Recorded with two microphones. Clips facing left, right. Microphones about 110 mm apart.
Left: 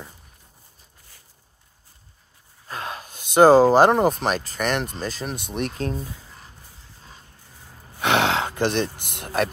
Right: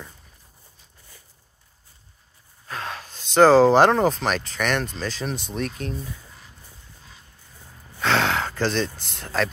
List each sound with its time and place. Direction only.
2.9 s a sound: 10° left (ahead or behind)
4.3 s speech: 5° left (ahead or behind)
5.5 s speech: 25° left (ahead or behind)
8.0 s gasp: 20° left (ahead or behind)